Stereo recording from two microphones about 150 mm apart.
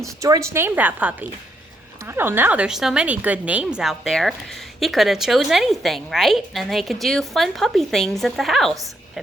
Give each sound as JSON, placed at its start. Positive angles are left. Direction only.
{"t": 0.0, "sound": "a woman's voice", "side_deg": -20}